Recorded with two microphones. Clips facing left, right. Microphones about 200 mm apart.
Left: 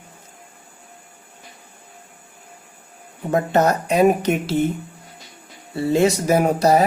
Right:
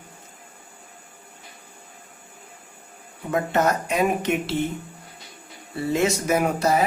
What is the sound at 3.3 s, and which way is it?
Speech, 35° left (ahead or behind).